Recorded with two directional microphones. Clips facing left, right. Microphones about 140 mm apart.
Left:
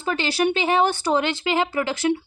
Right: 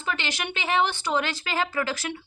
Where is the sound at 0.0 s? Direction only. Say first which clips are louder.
Left 9 dB; 35° left (ahead or behind).